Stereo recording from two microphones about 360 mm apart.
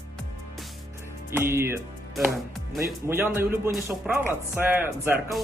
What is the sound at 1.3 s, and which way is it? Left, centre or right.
Speech, centre.